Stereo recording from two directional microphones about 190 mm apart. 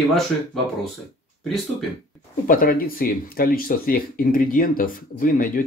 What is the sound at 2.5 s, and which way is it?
Speech, 50° left (ahead or behind).